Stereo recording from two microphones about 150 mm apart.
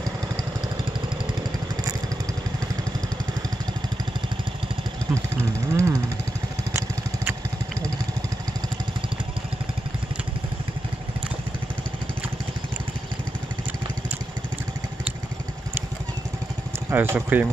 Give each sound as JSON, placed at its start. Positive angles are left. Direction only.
{"t": 5.1, "sound": "speech", "side_deg": -20}
{"t": 16.9, "sound": "speech", "side_deg": -15}